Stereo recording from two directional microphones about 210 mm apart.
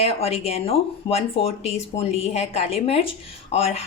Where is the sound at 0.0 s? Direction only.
30° left (ahead or behind).